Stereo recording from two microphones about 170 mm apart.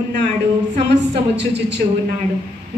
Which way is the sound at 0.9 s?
90° right.